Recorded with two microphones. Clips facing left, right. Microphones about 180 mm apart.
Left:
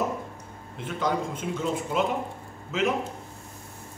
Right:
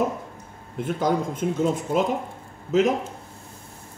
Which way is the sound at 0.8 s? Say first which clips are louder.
Right 4 dB; 45° right (ahead or behind).